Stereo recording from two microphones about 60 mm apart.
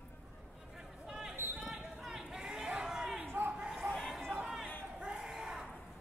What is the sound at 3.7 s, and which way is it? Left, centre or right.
Chatter, centre.